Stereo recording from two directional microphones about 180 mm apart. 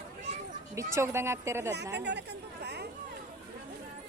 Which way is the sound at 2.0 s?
70° right (ahead or behind).